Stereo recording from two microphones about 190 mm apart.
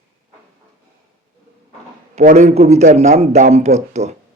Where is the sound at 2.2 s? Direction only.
40° right (ahead or behind).